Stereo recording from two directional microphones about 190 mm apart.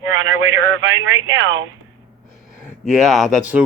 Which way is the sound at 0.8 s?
75° right (ahead or behind).